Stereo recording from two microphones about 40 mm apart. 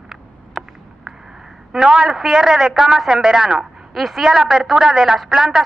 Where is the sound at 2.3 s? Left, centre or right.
Centre.